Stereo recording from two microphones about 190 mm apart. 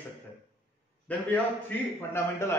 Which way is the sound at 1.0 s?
10° left (ahead or behind).